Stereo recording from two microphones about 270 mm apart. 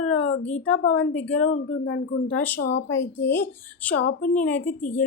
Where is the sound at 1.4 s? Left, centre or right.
Left.